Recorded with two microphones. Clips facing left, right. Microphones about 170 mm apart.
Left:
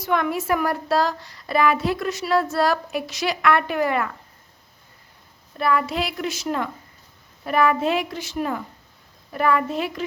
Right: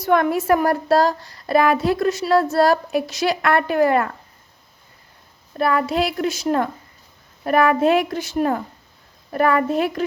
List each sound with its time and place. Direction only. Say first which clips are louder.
0.0 s speech: right 5 dB; 45° right (ahead or behind)
5.5 s a woman's voice: right 3 dB; 40° right (ahead or behind)